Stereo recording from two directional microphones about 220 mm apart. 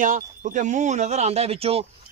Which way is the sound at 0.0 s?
35° right (ahead or behind).